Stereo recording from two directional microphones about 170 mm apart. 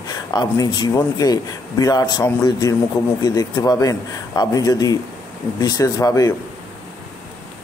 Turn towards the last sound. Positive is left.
turn(degrees=20)  # may be behind; listen again after turning